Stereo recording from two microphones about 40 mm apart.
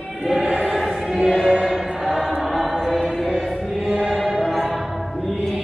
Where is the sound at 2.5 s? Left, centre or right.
Centre.